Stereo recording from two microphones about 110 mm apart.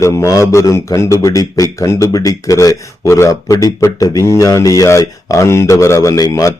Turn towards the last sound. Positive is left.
turn(degrees=30)  # may be behind; listen again after turning